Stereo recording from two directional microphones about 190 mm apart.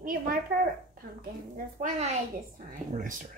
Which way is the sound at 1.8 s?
35° right (ahead or behind).